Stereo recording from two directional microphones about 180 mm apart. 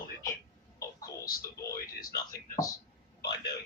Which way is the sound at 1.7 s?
55° left (ahead or behind).